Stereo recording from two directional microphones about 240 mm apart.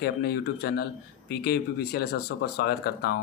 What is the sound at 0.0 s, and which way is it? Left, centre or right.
Speech, left.